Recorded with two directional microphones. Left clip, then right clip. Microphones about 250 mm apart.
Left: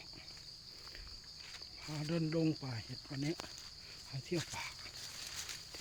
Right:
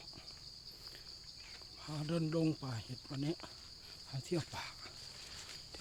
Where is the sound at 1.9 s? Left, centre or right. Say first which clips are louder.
Even; centre.